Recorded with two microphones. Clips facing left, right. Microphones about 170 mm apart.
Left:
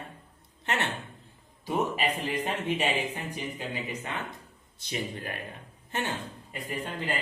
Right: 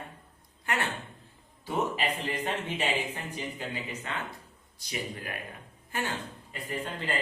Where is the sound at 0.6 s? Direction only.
25° left (ahead or behind).